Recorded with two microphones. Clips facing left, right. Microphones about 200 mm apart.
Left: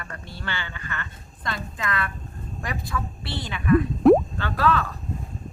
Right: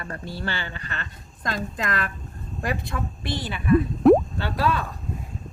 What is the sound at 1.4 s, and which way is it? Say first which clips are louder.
A woman's voice: right 2 dB; 45° right (ahead or behind).